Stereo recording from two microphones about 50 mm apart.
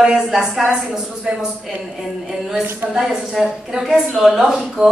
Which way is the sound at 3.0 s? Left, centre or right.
Centre.